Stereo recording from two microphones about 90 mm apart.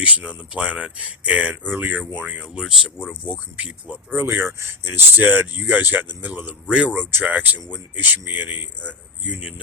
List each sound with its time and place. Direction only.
0.0 s speech: 15° right (ahead or behind)
4.2 s speech: 25° right (ahead or behind)